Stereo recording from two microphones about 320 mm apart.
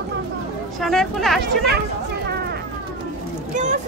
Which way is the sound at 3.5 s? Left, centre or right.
Right.